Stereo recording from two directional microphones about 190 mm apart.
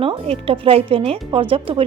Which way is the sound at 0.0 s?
30° right (ahead or behind).